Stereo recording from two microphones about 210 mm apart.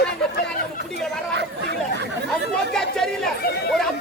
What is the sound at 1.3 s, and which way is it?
Chatter, 55° right (ahead or behind).